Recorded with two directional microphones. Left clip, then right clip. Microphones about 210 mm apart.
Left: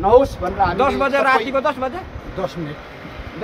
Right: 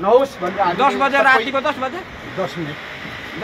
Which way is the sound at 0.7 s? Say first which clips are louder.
Right 2 dB; 35° left (ahead or behind).